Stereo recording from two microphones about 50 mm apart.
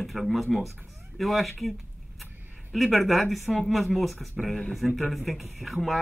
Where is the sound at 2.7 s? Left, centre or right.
Centre.